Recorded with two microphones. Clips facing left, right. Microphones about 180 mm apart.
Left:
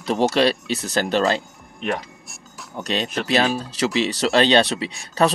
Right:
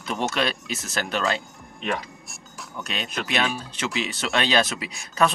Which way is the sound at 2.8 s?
35° left (ahead or behind).